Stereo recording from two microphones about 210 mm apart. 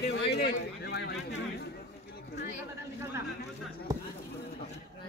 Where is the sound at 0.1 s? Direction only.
55° left (ahead or behind).